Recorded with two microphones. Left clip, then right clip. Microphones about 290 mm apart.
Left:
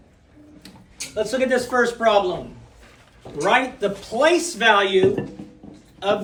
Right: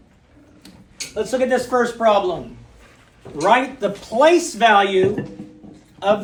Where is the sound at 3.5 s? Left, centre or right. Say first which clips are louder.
Right 3 dB; right.